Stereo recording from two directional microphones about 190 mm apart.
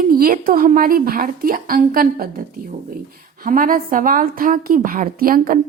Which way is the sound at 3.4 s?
45° right (ahead or behind).